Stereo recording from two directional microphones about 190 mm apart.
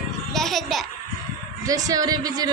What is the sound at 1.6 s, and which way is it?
Speech, 20° right (ahead or behind).